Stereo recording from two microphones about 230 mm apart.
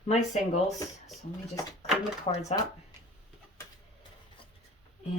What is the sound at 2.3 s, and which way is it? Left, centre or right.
Speech, left.